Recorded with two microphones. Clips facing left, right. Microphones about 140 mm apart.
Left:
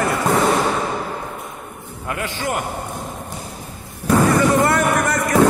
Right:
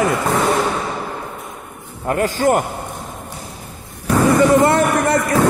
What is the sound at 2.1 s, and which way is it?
Speech, 40° right (ahead or behind).